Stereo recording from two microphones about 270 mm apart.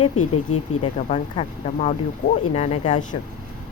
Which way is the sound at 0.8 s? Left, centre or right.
Left.